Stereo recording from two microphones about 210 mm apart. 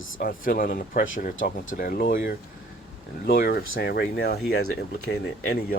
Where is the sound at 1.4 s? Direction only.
65° left (ahead or behind).